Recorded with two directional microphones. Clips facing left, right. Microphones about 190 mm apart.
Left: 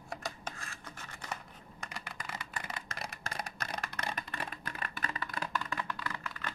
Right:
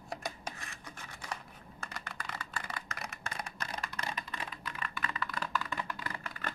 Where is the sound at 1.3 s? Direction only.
10° left (ahead or behind).